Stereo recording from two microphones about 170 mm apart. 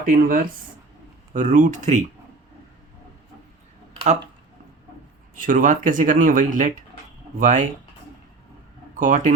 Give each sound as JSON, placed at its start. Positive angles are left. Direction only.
{"t": 0.0, "sound": "speech", "side_deg": -55}
{"t": 5.3, "sound": "speech", "side_deg": -50}
{"t": 9.0, "sound": "speech", "side_deg": -50}